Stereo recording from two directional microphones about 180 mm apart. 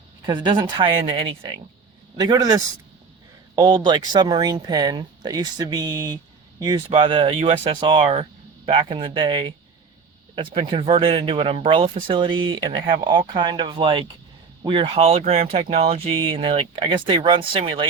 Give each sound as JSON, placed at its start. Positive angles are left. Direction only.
{"t": 0.3, "sound": "speech", "side_deg": -25}